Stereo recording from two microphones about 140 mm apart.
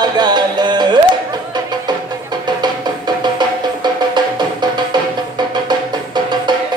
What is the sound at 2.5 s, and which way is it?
Music, 30° right (ahead or behind).